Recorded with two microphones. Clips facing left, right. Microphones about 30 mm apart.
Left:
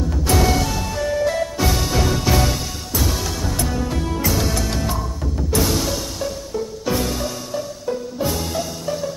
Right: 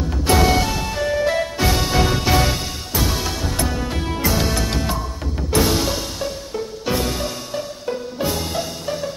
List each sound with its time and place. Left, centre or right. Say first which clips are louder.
0.1 s music: right 3 dB; right